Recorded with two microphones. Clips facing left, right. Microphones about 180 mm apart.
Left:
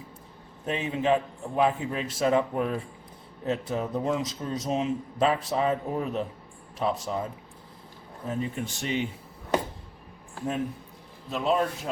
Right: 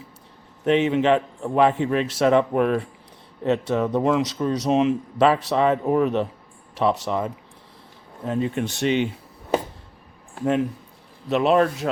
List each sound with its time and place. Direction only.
0.6 s a man's voice: 80° right
8.3 s a man's voice: 75° right (ahead or behind)
11.3 s a man's voice: 75° right (ahead or behind)